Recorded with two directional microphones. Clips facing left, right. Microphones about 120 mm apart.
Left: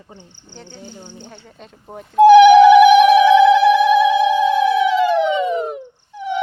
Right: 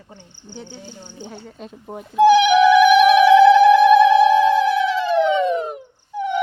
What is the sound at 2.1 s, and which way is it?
Speech, 45° left (ahead or behind).